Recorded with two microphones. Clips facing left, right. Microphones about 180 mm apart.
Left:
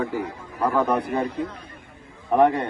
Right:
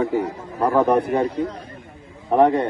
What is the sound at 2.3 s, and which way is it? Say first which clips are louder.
Speech: right 3 dB; 30° right (ahead or behind).